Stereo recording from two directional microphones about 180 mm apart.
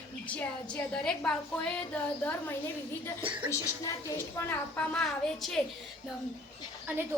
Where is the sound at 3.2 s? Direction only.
30° right (ahead or behind).